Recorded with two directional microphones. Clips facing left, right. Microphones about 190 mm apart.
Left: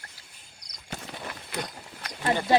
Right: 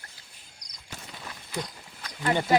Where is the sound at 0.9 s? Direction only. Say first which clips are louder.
Left 5 dB; 65° left (ahead or behind).